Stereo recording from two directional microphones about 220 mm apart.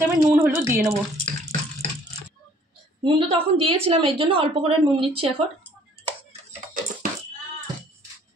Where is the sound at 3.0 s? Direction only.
25° right (ahead or behind).